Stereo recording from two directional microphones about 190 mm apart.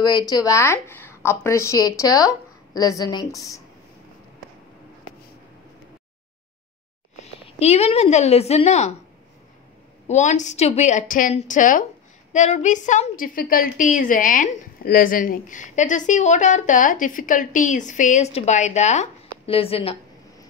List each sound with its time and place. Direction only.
0.0 s a woman's voice: 20° left (ahead or behind)
7.4 s a woman's voice: 35° left (ahead or behind)
10.0 s a woman's voice: 40° left (ahead or behind)